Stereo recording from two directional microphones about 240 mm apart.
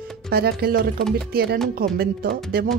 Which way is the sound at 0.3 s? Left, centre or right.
Right.